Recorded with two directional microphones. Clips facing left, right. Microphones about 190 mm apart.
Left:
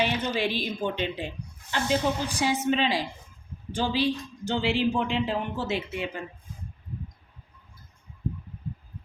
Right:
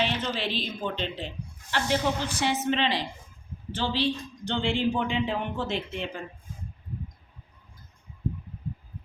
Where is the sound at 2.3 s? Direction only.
10° left (ahead or behind).